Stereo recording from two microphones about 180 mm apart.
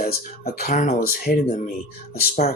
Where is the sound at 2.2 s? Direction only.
55° left (ahead or behind).